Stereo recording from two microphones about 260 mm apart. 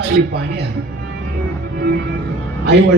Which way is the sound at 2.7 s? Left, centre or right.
Right.